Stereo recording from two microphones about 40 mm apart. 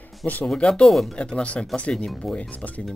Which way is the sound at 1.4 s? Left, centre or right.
Left.